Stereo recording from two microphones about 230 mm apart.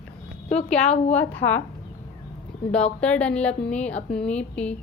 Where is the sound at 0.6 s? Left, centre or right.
Centre.